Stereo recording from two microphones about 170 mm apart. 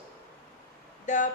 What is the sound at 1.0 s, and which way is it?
Speech, 45° left (ahead or behind).